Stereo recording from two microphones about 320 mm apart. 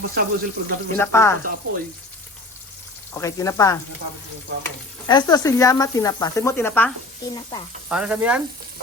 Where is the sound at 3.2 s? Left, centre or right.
Centre.